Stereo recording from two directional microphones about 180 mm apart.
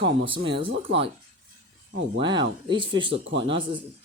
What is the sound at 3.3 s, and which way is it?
Speech, 75° right (ahead or behind).